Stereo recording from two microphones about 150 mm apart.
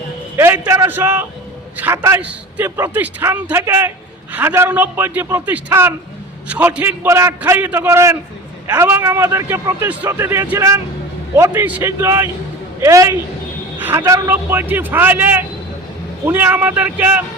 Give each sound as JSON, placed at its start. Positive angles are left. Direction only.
{"t": 0.3, "sound": "a man's voice", "side_deg": -15}
{"t": 13.7, "sound": "a sound", "side_deg": -10}
{"t": 14.3, "sound": "a man's voice", "side_deg": -15}